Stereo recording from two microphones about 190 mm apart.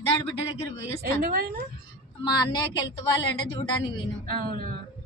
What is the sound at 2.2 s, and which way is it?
A woman's voice, 20° left (ahead or behind).